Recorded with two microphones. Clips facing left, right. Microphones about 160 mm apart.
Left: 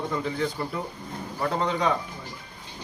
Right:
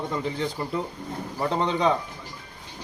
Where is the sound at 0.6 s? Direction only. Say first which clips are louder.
Right 2 dB; 15° right (ahead or behind).